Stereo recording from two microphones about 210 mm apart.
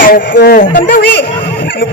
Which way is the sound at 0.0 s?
45° left (ahead or behind).